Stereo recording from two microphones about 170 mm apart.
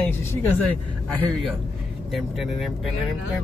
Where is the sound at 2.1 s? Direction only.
Centre (ahead or behind).